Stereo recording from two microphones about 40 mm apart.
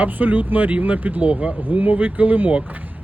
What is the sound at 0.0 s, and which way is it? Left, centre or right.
Speech, right.